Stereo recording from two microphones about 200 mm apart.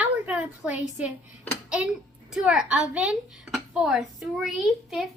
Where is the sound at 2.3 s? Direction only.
5° right (ahead or behind).